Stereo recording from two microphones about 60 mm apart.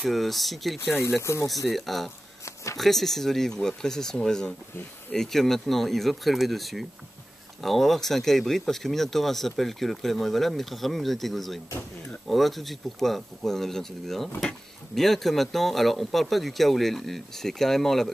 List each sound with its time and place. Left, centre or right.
0.0 s speech: centre
1.2 s speech: left
1.7 s speech: centre
2.4 s a sound: left
2.8 s speech: centre